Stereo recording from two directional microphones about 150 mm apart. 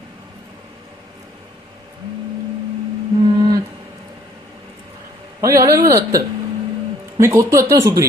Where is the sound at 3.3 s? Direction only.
25° right (ahead or behind).